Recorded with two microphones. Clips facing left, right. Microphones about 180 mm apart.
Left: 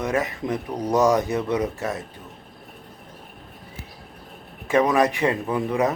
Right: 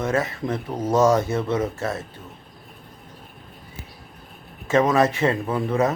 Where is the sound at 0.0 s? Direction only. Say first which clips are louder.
Right 1 dB; 15° left (ahead or behind).